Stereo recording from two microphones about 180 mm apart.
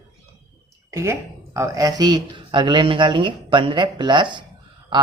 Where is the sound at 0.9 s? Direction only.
15° right (ahead or behind).